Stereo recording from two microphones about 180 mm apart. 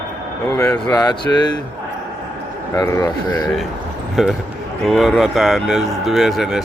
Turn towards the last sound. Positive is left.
turn(degrees=0)  # may be behind; listen again after turning